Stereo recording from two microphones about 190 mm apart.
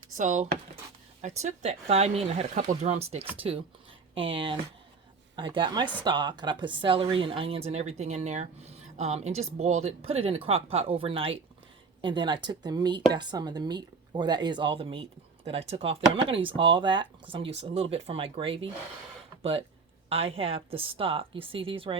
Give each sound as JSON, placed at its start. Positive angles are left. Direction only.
{"t": 0.1, "sound": "speech", "side_deg": -40}